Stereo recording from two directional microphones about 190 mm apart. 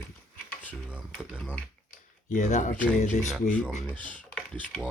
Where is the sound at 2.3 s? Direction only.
40° left (ahead or behind).